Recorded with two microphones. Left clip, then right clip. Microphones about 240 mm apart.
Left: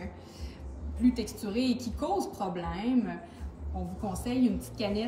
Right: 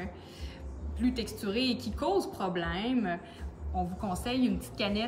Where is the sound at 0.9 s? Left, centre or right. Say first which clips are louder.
Left 3 dB; centre.